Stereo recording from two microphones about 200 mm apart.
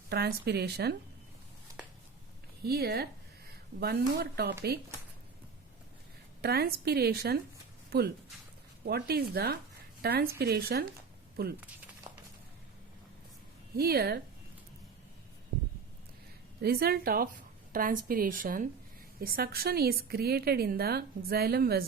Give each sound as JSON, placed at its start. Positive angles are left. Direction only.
{"t": 0.1, "sound": "speech", "side_deg": -55}
{"t": 2.6, "sound": "a woman's voice", "side_deg": -50}
{"t": 6.4, "sound": "a woman's voice", "side_deg": -50}
{"t": 12.1, "sound": "a sound", "side_deg": -20}
{"t": 13.7, "sound": "a woman's voice", "side_deg": -50}
{"t": 16.6, "sound": "a woman's voice", "side_deg": -50}